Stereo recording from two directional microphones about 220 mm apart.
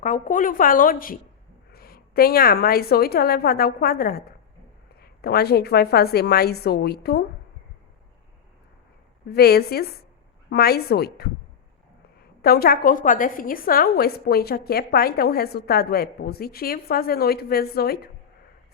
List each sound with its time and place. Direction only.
0.0 s a woman's voice: 35° left (ahead or behind)
9.3 s a woman's voice: 45° left (ahead or behind)
12.4 s a woman's voice: 45° left (ahead or behind)